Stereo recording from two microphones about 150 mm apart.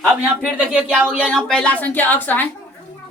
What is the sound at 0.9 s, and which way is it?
A woman's voice, 5° left (ahead or behind).